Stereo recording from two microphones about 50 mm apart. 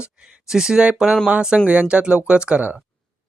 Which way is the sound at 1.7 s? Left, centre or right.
Right.